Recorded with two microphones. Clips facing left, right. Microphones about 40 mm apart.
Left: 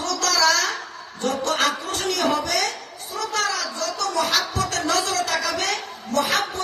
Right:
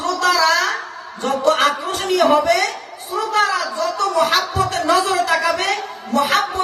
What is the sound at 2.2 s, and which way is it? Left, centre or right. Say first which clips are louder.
Speech: right 9 dB; right.